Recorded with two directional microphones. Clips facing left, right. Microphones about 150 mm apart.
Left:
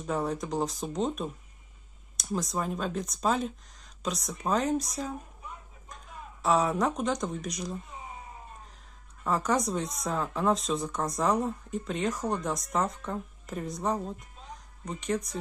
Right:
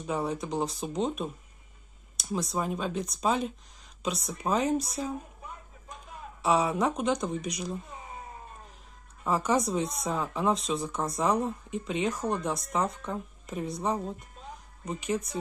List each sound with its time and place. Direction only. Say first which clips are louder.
0.0 s speech: even; centre (ahead or behind)
6.4 s speech: even; centre (ahead or behind)
9.2 s speech: right 1 dB; 5° right (ahead or behind)